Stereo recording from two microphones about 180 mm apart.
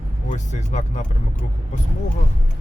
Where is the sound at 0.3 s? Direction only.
40° left (ahead or behind).